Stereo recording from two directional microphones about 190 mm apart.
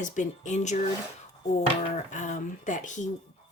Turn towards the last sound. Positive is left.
turn(degrees=40)  # may be behind; listen again after turning